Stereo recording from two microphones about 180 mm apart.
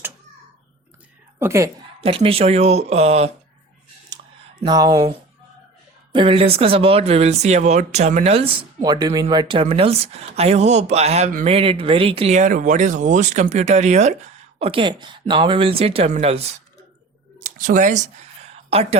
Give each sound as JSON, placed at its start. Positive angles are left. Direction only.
{"t": 1.4, "sound": "a woman's voice", "side_deg": -15}
{"t": 2.0, "sound": "speech", "side_deg": -30}
{"t": 4.6, "sound": "speech", "side_deg": -20}
{"t": 6.1, "sound": "speech", "side_deg": -30}
{"t": 11.5, "sound": "speech", "side_deg": -30}
{"t": 14.6, "sound": "speech", "side_deg": -30}
{"t": 17.4, "sound": "speech", "side_deg": -45}
{"t": 18.7, "sound": "speech", "side_deg": -35}